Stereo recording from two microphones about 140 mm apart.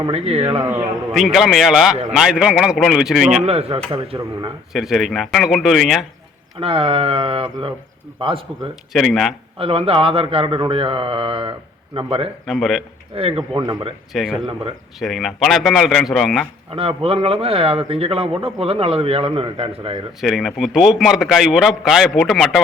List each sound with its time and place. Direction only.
0.0 s a man's voice: 45° right (ahead or behind)
1.1 s a man's voice: centre (ahead or behind)
3.4 s a man's voice: 45° right (ahead or behind)
4.7 s a man's voice: centre (ahead or behind)
6.6 s speech: 40° right (ahead or behind)
8.9 s a man's voice: centre (ahead or behind)
9.6 s speech: 40° right (ahead or behind)
12.5 s a man's voice: centre (ahead or behind)
13.1 s speech: 45° right (ahead or behind)
14.1 s a man's voice: centre (ahead or behind)
16.7 s a man's voice: 45° right (ahead or behind)
20.2 s a man's voice: centre (ahead or behind)